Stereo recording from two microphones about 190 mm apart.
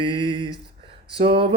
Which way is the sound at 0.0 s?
25° right (ahead or behind).